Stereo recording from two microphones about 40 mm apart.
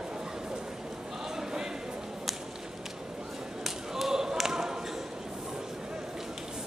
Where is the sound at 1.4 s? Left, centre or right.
Centre.